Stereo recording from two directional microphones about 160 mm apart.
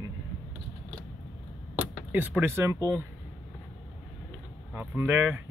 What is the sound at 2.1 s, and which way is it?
Speech, 10° right (ahead or behind).